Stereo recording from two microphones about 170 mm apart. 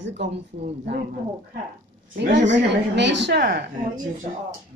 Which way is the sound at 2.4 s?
90° right.